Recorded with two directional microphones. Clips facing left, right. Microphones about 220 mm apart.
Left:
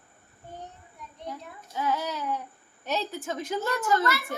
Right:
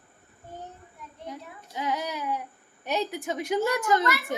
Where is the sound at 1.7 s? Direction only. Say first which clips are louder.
Left 1 dB; 15° right (ahead or behind).